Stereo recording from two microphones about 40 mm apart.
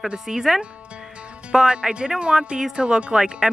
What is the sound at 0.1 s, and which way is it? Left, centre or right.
Speech, centre.